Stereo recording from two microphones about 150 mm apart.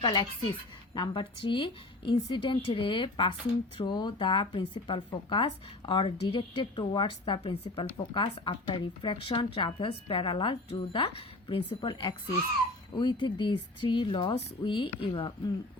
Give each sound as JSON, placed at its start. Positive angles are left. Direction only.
{"t": 0.0, "sound": "speech", "side_deg": 30}